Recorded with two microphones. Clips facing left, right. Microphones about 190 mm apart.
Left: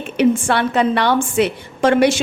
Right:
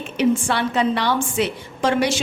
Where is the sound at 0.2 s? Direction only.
60° left (ahead or behind).